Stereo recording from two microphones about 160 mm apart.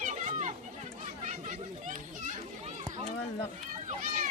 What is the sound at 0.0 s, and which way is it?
Chatter, 50° right (ahead or behind).